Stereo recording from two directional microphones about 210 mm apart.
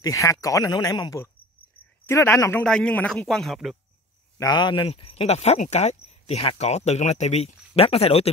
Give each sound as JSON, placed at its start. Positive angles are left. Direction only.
{"t": 0.0, "sound": "a man's voice", "side_deg": 15}
{"t": 4.4, "sound": "speech", "side_deg": 20}